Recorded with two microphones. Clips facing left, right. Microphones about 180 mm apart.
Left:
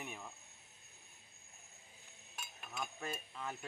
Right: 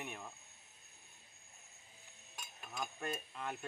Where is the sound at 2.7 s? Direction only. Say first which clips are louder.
Right 2 dB; centre (ahead or behind).